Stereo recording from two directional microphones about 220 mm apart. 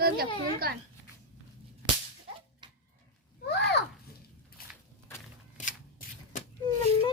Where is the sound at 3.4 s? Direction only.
50° left (ahead or behind).